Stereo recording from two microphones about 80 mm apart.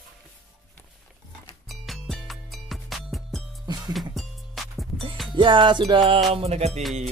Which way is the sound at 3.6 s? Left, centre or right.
Right.